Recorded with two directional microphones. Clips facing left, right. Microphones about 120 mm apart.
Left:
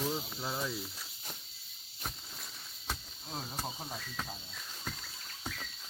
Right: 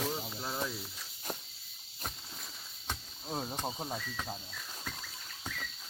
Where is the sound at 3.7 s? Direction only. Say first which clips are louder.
Right 4 dB; 20° right (ahead or behind).